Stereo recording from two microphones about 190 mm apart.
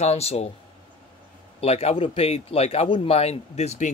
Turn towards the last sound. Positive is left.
turn(degrees=35)  # may be behind; listen again after turning